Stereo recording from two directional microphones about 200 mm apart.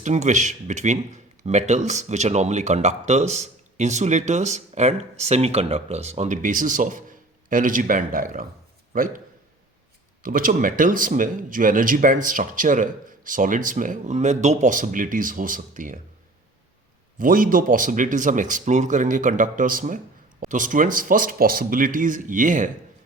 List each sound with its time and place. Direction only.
0.0 s a man's voice: 35° right (ahead or behind)
10.2 s speech: 45° right (ahead or behind)
17.2 s speech: 45° right (ahead or behind)